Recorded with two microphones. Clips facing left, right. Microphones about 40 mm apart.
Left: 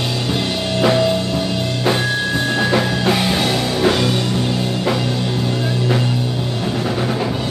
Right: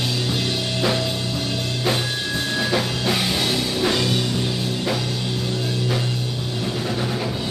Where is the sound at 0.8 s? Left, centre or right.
Left.